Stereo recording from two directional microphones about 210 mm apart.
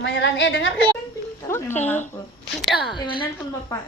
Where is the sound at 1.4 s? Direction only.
10° left (ahead or behind).